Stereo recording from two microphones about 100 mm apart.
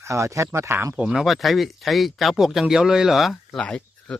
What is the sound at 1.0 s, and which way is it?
Speech, 10° right (ahead or behind).